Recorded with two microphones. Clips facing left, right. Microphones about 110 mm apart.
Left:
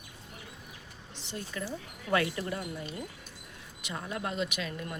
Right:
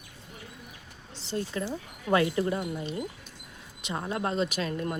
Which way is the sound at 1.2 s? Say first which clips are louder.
Right 7 dB; 30° right (ahead or behind).